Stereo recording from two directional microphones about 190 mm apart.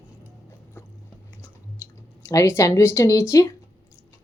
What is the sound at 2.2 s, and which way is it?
A woman's voice, 15° left (ahead or behind).